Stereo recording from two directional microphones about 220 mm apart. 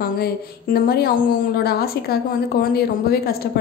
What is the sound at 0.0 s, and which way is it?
Speech, 40° left (ahead or behind).